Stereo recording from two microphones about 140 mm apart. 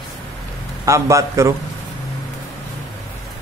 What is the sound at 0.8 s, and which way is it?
Speech, 20° right (ahead or behind).